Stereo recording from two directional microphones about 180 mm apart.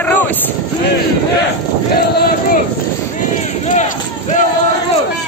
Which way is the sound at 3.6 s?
45° left (ahead or behind).